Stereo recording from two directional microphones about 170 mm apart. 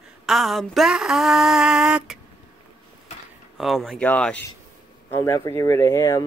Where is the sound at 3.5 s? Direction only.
Centre (ahead or behind).